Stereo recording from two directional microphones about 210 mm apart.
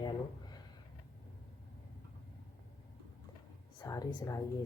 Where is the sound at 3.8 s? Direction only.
15° left (ahead or behind).